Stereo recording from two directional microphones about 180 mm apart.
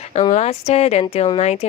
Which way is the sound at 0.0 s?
40° left (ahead or behind).